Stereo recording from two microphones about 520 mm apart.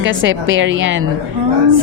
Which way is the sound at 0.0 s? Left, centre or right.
Right.